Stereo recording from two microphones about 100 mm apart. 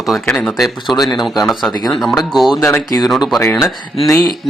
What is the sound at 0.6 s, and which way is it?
Speech, centre (ahead or behind).